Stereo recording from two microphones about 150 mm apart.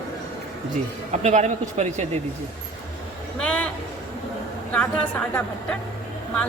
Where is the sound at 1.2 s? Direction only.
50° right (ahead or behind).